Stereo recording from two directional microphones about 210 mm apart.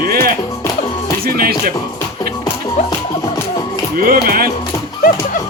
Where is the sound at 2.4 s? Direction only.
15° left (ahead or behind).